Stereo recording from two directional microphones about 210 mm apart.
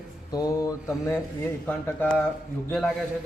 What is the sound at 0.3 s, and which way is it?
A man's voice, 15° left (ahead or behind).